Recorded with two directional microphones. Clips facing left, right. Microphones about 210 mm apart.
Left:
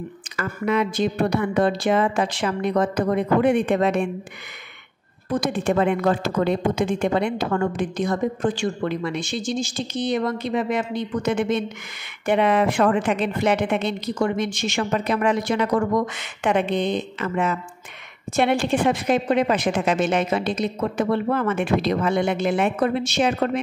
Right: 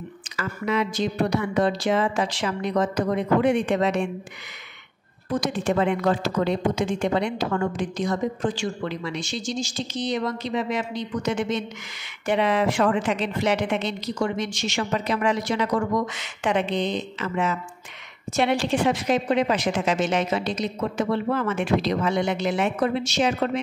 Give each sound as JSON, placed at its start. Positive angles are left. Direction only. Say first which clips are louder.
{"t": 0.4, "sound": "a woman's voice", "louder": "left 3 dB", "side_deg": 55}
{"t": 5.3, "sound": "a woman's voice", "louder": "left 2 dB", "side_deg": 55}